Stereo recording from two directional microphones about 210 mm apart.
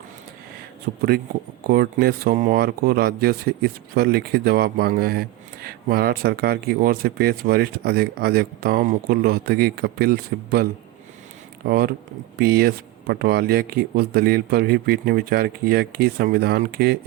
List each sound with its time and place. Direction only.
0.9 s speech: 45° right (ahead or behind)